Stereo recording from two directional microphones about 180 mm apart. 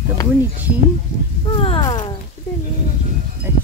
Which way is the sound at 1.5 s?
30° left (ahead or behind).